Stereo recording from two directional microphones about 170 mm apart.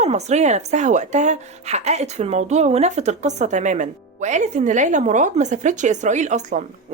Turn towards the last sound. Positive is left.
turn(degrees=-45)  # may be behind; listen again after turning